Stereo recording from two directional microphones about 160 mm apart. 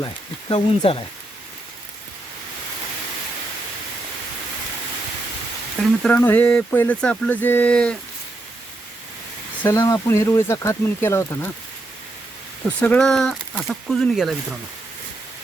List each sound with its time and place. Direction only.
0.0 s speech: 30° left (ahead or behind)
5.8 s speech: 5° left (ahead or behind)
9.6 s speech: 20° left (ahead or behind)
12.6 s speech: 10° left (ahead or behind)